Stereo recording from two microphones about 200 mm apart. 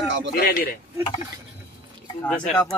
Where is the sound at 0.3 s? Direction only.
50° left (ahead or behind).